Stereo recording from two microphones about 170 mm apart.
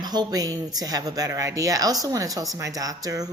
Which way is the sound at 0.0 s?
25° right (ahead or behind).